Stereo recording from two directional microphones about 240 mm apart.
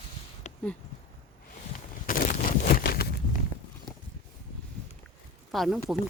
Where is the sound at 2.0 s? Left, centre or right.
Left.